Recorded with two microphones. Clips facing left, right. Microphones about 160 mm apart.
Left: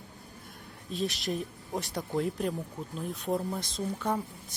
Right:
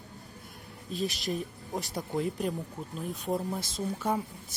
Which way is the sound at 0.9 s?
Centre (ahead or behind).